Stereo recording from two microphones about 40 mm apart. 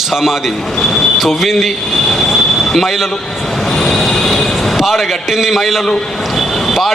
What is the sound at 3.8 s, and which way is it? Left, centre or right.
Train, centre.